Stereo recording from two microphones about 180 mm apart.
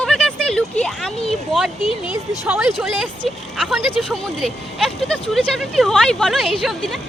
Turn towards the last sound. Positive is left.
turn(degrees=0)  # may be behind; listen again after turning